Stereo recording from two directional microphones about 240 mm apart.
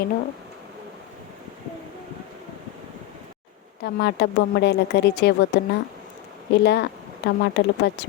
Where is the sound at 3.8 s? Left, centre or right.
Left.